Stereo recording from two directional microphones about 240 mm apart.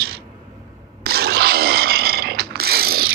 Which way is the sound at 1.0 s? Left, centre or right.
Right.